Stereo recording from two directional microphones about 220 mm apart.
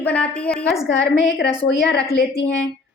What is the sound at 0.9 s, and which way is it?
A woman's voice, 55° left (ahead or behind).